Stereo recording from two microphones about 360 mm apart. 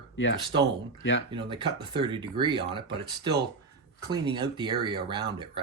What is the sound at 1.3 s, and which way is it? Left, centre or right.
Speech, centre.